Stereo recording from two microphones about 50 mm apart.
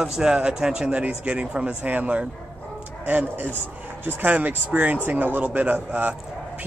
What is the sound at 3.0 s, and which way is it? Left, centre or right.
A man's voice, right.